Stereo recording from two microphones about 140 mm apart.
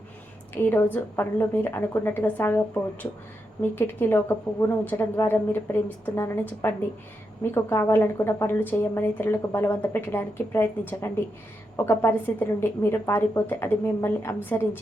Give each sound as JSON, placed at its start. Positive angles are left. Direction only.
{"t": 0.5, "sound": "a woman's voice", "side_deg": 15}